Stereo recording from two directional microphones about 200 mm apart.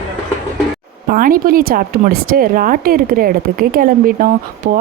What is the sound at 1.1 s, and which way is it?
A woman's voice, 45° right (ahead or behind).